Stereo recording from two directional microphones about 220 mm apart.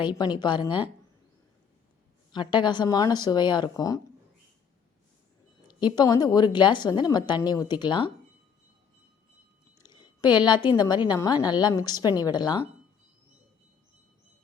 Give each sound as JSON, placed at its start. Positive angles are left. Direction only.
{"t": 0.0, "sound": "a woman's voice", "side_deg": 20}
{"t": 2.3, "sound": "a woman's voice", "side_deg": 20}
{"t": 5.6, "sound": "a woman's voice", "side_deg": 20}
{"t": 9.9, "sound": "a sound", "side_deg": 20}
{"t": 10.8, "sound": "a woman's voice", "side_deg": 20}